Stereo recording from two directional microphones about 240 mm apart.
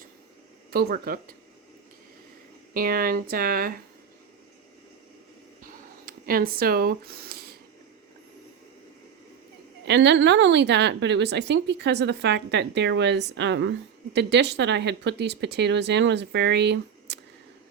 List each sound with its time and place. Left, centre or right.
0.7 s speech: right
2.7 s speech: right
6.1 s speech: right
9.8 s a woman's voice: right